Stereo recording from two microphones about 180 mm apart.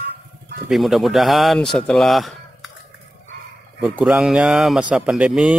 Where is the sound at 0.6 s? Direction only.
Centre (ahead or behind).